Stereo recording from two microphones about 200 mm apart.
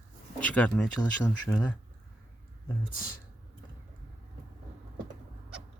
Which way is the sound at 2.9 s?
45° left (ahead or behind).